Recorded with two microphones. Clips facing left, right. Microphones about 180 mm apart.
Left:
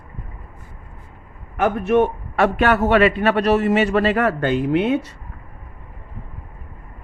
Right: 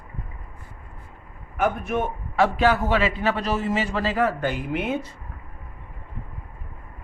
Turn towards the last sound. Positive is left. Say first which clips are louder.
# left 8 dB
turn(degrees=70)  # may be behind; listen again after turning